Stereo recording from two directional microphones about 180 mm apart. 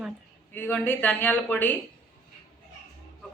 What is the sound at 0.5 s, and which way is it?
A woman's voice, 10° left (ahead or behind).